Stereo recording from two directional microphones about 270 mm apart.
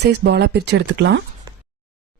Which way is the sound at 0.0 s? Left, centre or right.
Right.